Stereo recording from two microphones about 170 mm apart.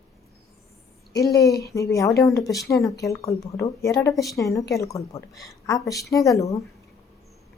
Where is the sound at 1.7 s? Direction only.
20° left (ahead or behind).